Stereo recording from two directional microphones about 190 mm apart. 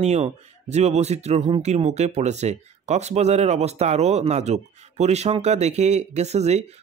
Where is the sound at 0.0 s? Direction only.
35° right (ahead or behind).